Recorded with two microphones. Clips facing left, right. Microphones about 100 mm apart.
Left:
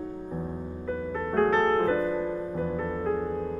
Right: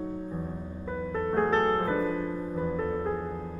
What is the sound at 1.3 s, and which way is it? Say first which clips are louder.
Music: left 2 dB; 15° right (ahead or behind).